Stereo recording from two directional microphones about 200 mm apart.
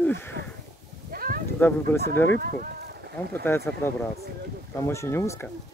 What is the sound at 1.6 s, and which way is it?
Speech, 10° left (ahead or behind).